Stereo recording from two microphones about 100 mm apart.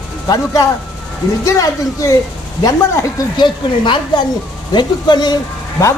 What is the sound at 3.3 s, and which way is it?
Speech, 50° left (ahead or behind).